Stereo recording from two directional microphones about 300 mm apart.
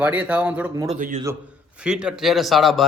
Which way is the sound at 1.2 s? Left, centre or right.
Centre.